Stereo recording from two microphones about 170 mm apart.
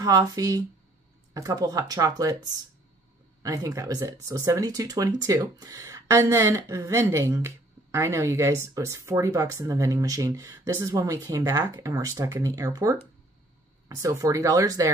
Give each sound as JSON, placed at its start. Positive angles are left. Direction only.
{"t": 0.0, "sound": "speech", "side_deg": -20}
{"t": 3.4, "sound": "speech", "side_deg": -20}